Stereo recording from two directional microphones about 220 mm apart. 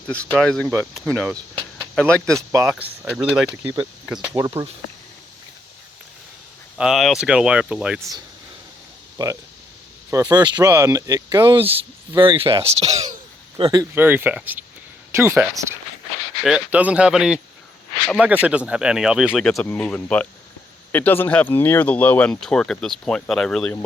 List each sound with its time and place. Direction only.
0.1 s speech: 5° left (ahead or behind)
2.3 s speech: 15° right (ahead or behind)
6.7 s speech: centre (ahead or behind)
9.1 s speech: 15° right (ahead or behind)
13.6 s speech: 15° right (ahead or behind); by 23.7 s 5° left (ahead or behind)